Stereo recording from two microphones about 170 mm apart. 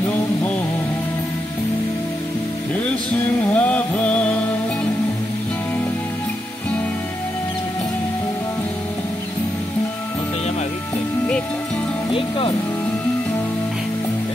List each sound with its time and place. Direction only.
3.4 s music: 5° left (ahead or behind)
12.1 s music: 30° left (ahead or behind)